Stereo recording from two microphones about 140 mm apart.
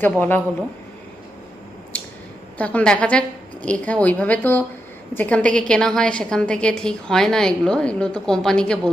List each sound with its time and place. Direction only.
0.0 s a woman's voice: 15° left (ahead or behind)
1.9 s a sound: 10° left (ahead or behind)
2.6 s a woman's voice: 10° left (ahead or behind)